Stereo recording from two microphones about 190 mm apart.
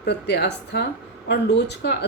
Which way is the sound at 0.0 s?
60° left (ahead or behind).